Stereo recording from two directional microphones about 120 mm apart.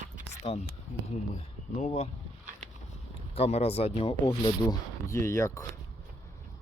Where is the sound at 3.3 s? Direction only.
60° left (ahead or behind).